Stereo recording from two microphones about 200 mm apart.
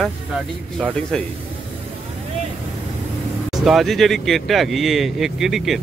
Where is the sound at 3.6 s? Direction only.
Centre (ahead or behind).